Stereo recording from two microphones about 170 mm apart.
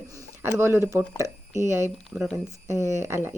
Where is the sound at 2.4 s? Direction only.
15° right (ahead or behind).